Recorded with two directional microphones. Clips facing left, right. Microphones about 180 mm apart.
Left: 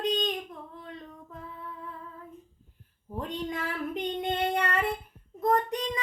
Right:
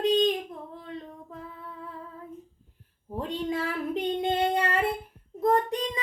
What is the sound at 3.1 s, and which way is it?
Child singing, 30° right (ahead or behind).